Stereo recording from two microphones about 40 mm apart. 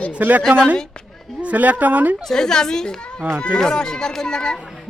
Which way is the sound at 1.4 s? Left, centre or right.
Right.